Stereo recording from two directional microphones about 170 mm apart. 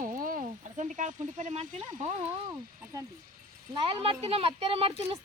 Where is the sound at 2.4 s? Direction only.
20° right (ahead or behind).